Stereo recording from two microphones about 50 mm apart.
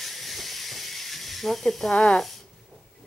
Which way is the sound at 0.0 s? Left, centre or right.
Centre.